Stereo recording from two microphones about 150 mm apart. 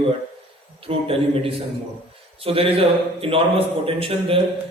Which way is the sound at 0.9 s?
40° right (ahead or behind).